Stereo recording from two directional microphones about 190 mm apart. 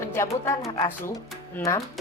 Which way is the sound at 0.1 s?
15° left (ahead or behind).